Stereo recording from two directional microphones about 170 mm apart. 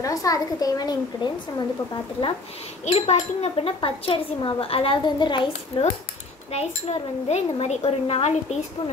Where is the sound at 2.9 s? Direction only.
40° left (ahead or behind).